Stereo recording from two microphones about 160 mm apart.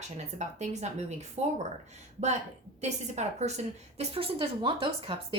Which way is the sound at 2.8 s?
45° right (ahead or behind).